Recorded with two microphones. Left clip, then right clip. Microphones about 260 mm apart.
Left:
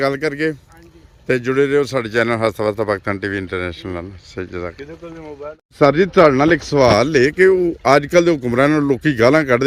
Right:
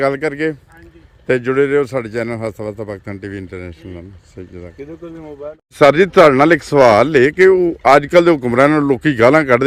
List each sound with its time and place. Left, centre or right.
0.0 s speech: centre
5.0 s speech: right
5.8 s speech: centre